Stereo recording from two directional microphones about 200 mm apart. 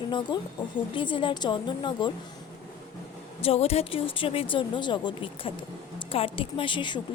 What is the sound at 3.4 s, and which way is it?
A woman's voice, 30° left (ahead or behind).